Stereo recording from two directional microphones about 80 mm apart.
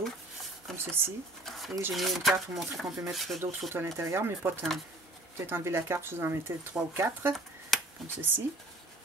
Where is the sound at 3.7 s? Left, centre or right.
Right.